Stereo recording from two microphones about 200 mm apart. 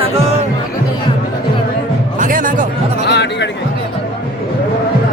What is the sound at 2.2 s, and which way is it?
Music, 40° right (ahead or behind).